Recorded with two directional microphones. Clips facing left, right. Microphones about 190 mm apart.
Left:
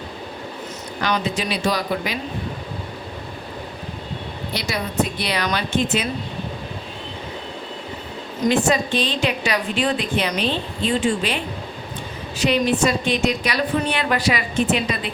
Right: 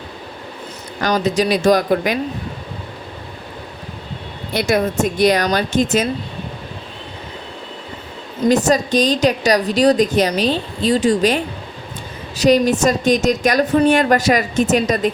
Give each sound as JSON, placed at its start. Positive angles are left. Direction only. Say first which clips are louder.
{"t": 1.0, "sound": "a woman's voice", "louder": "right 6 dB", "side_deg": -40}
{"t": 4.5, "sound": "a woman's voice", "louder": "right 7 dB", "side_deg": -50}
{"t": 8.4, "sound": "a woman's voice", "louder": "right 4 dB", "side_deg": -40}
{"t": 12.4, "sound": "a woman's voice", "louder": "right 5 dB", "side_deg": -40}